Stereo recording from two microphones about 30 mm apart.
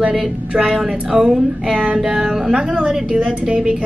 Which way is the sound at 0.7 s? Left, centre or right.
Right.